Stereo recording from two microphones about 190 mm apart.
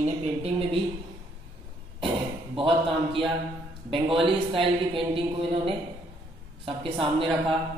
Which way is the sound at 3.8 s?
25° right (ahead or behind).